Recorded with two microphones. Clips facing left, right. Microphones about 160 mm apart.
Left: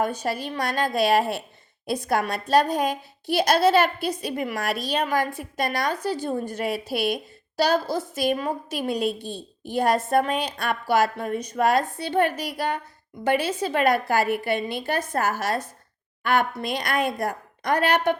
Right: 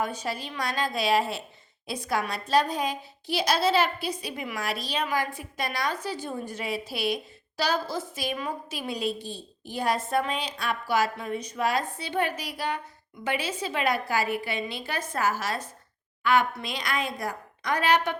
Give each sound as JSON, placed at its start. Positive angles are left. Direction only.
{"t": 0.0, "sound": "a woman's voice", "side_deg": 50}
{"t": 8.2, "sound": "a woman's voice", "side_deg": 50}